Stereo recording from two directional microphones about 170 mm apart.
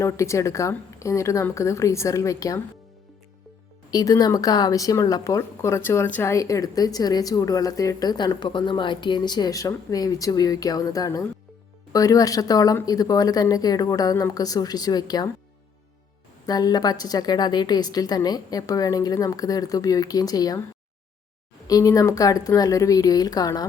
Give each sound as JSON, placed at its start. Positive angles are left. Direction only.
{"t": 0.0, "sound": "speech", "side_deg": 15}
{"t": 3.9, "sound": "a woman's voice", "side_deg": 20}
{"t": 16.5, "sound": "a woman's voice", "side_deg": 20}
{"t": 21.7, "sound": "a woman's voice", "side_deg": 20}